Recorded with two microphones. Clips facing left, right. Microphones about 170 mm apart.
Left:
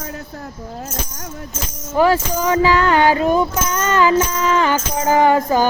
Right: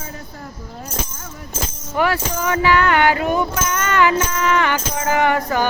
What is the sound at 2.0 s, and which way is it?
Music, 30° left (ahead or behind).